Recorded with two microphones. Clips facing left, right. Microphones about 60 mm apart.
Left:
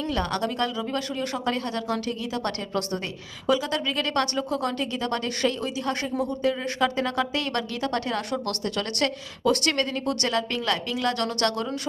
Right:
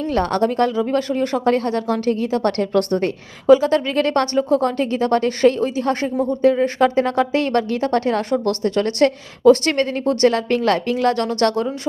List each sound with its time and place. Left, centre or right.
0.0 s speech: right